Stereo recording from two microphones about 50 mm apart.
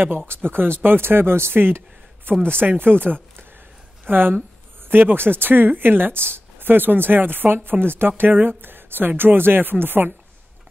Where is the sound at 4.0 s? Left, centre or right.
Right.